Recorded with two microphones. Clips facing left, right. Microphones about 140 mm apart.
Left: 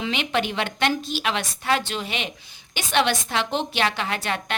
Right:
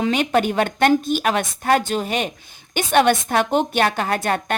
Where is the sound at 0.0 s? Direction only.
45° right (ahead or behind).